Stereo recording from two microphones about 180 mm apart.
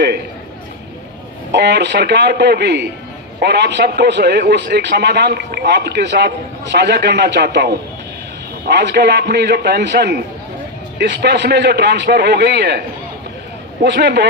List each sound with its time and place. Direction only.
1.5 s a man's voice: 70° right (ahead or behind)
13.8 s a man's voice: 70° right (ahead or behind)